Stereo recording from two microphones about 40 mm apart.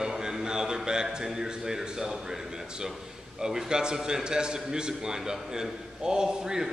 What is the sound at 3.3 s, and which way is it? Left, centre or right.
A man's voice, centre.